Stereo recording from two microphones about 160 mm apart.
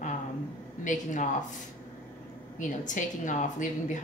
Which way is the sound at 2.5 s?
50° left (ahead or behind).